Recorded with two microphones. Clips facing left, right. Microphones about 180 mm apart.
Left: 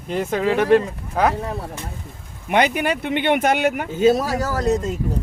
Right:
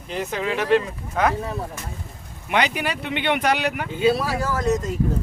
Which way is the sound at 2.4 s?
50° left (ahead or behind).